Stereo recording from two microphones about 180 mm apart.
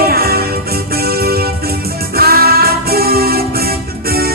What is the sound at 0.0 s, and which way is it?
Music, 60° right (ahead or behind).